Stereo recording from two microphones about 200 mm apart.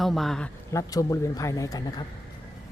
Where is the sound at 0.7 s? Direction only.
15° left (ahead or behind).